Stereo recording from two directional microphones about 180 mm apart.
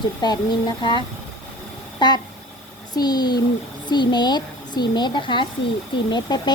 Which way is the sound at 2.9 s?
25° left (ahead or behind).